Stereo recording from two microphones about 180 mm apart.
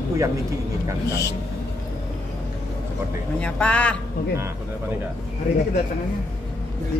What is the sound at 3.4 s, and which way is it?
Speech, 5° left (ahead or behind).